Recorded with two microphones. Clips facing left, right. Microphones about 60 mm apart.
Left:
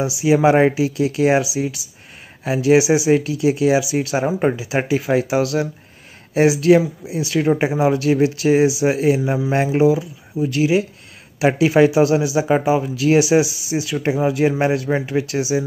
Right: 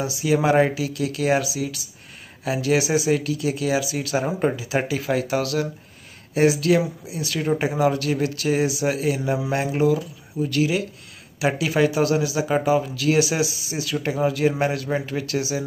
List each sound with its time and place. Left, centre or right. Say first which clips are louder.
0.2 s speech: left 5 dB; left